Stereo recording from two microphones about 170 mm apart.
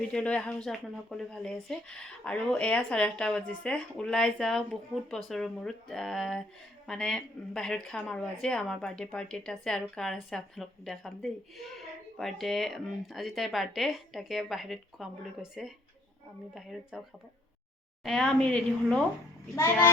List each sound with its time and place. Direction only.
0.1 s speech: 5° left (ahead or behind)
16.9 s speech: centre (ahead or behind)
19.5 s a child's voice: 15° left (ahead or behind)